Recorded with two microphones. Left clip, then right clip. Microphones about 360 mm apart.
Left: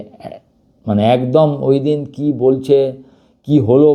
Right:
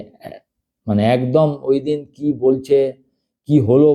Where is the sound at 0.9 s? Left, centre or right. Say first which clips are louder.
Left 3 dB; left.